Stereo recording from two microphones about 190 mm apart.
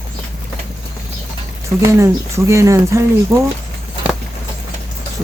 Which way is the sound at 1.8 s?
15° right (ahead or behind).